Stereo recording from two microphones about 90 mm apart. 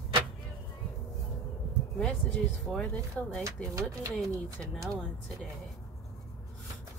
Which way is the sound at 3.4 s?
40° right (ahead or behind).